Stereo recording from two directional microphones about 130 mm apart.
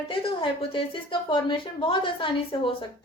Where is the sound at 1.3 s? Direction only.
40° left (ahead or behind).